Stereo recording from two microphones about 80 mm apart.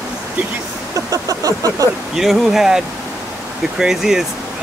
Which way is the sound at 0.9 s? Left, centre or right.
Right.